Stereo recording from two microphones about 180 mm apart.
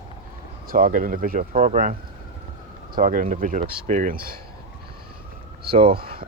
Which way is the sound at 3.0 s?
50° right (ahead or behind).